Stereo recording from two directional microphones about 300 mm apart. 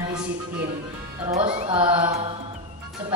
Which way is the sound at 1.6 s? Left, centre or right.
Centre.